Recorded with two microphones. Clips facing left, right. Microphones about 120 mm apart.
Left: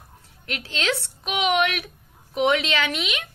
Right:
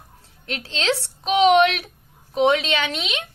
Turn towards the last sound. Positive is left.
turn(degrees=-25)  # may be behind; listen again after turning